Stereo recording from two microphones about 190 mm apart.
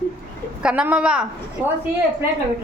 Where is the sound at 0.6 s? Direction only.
5° right (ahead or behind).